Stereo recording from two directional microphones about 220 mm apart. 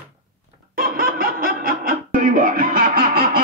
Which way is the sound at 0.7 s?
40° right (ahead or behind).